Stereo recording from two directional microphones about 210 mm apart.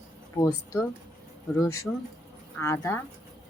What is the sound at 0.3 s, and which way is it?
A woman's voice, 15° left (ahead or behind).